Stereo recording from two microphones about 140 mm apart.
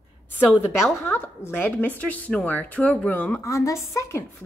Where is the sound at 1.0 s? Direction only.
15° left (ahead or behind).